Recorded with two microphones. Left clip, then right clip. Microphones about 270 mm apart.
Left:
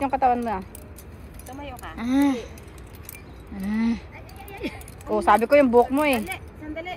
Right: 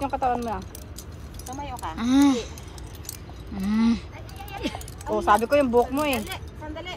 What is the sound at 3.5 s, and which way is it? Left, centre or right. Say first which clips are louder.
Speech: right 2 dB; centre.